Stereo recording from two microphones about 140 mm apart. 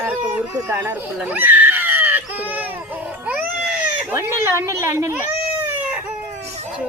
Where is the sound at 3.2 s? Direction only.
10° right (ahead or behind).